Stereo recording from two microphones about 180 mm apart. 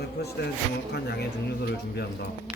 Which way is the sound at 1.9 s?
65° left (ahead or behind).